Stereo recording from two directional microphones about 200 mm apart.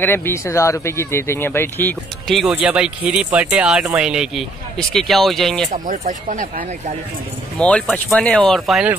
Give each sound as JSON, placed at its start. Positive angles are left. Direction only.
{"t": 0.0, "sound": "speech", "side_deg": 10}
{"t": 5.7, "sound": "speech", "side_deg": -35}
{"t": 7.5, "sound": "speech", "side_deg": 5}